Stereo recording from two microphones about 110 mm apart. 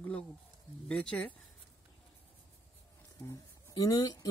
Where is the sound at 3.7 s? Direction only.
35° left (ahead or behind).